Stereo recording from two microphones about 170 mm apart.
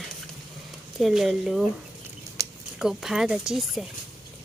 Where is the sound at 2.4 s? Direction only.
20° right (ahead or behind).